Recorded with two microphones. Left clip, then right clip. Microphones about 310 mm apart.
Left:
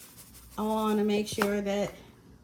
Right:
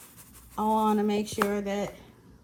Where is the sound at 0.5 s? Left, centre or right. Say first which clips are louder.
Right 4 dB; right.